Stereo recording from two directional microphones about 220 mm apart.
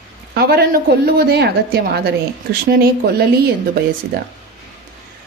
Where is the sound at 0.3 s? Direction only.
45° right (ahead or behind).